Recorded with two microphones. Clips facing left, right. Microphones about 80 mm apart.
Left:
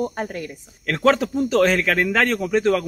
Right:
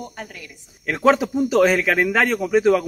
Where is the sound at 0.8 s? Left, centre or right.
Centre.